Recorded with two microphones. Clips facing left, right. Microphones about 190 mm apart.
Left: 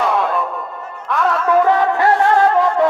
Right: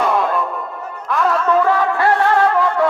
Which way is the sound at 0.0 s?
Centre (ahead or behind).